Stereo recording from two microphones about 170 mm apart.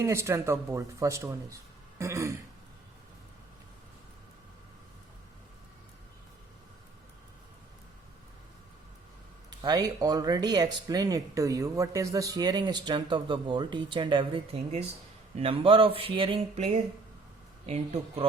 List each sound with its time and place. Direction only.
0.0 s speech: 15° right (ahead or behind)
9.5 s speech: 25° right (ahead or behind); by 18.3 s 40° right (ahead or behind)